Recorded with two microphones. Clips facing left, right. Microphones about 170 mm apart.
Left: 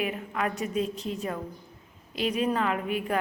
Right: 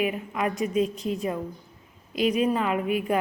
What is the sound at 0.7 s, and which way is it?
Speech, 35° left (ahead or behind).